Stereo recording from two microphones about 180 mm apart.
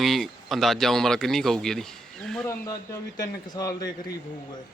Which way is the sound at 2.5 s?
15° left (ahead or behind).